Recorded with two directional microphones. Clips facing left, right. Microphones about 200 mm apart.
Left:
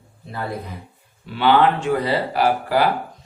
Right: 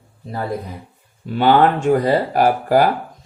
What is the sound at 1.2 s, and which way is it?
Speech, 45° right (ahead or behind).